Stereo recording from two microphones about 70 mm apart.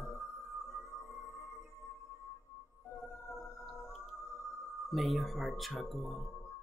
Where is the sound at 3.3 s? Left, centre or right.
Left.